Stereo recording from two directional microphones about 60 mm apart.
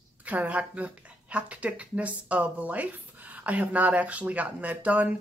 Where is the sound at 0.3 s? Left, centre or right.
Right.